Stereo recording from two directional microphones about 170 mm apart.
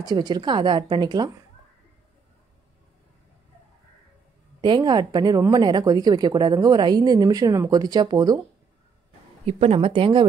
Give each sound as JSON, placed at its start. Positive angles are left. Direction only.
{"t": 0.0, "sound": "a woman's voice", "side_deg": -25}
{"t": 4.6, "sound": "a woman's voice", "side_deg": -25}
{"t": 9.5, "sound": "speech", "side_deg": -35}